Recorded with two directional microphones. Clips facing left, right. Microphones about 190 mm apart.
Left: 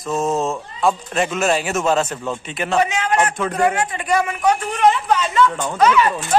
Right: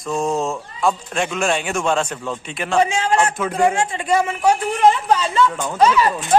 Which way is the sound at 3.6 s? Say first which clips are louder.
Right 2 dB; 25° right (ahead or behind).